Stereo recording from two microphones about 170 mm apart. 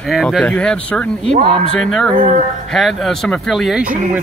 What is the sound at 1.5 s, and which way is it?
Speech, 5° left (ahead or behind).